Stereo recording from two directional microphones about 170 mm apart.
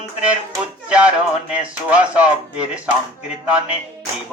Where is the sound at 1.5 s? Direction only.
5° right (ahead or behind).